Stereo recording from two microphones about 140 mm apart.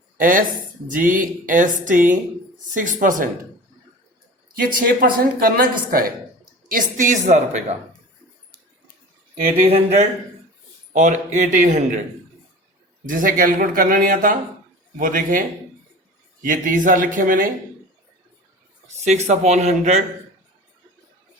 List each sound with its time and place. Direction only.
0.2 s speech: 75° right (ahead or behind)
4.7 s a woman's voice: 90° right
6.7 s a woman's voice: 70° right (ahead or behind); by 7.8 s 55° right (ahead or behind)
9.6 s speech: 50° right (ahead or behind)
10.9 s a woman's voice: 60° right (ahead or behind)
13.1 s a man's voice: 75° right (ahead or behind)
19.0 s speech: 55° right (ahead or behind)